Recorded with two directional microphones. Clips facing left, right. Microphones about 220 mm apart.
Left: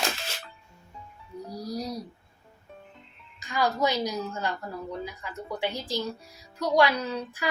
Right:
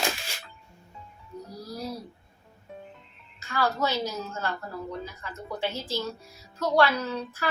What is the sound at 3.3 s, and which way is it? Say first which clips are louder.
A woman's voice: left 1 dB; 15° left (ahead or behind).